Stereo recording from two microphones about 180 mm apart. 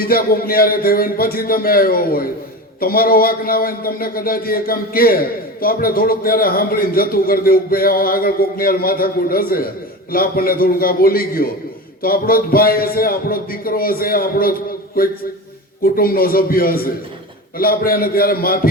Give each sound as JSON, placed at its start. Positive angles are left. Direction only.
{"t": 0.0, "sound": "a man's voice", "side_deg": 55}